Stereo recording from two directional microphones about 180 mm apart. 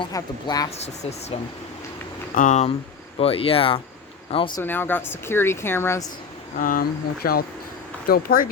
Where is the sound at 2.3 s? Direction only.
45° left (ahead or behind); by 4.6 s 30° left (ahead or behind).